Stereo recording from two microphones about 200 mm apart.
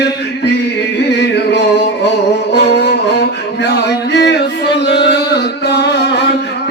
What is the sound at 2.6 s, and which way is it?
Music, 55° left (ahead or behind).